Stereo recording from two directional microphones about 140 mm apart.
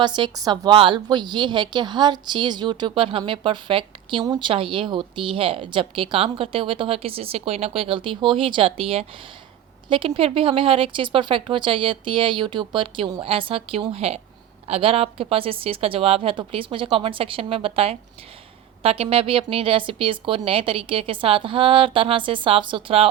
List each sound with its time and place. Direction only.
0.0 s a woman's voice: 30° right (ahead or behind)